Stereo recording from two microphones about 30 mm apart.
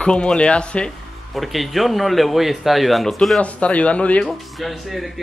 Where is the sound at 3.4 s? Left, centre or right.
Left.